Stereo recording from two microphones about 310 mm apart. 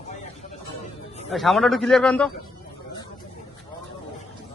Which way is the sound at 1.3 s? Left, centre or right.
Centre.